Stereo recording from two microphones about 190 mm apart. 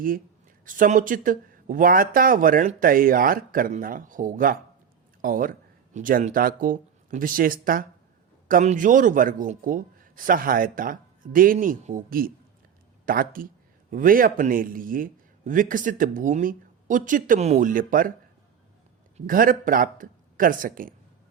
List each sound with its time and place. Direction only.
0.6 s a man's voice: 45° right (ahead or behind)
19.1 s a man's voice: 45° right (ahead or behind)